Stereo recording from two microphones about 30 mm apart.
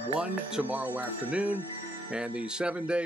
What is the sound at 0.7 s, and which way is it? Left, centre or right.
Speech, right.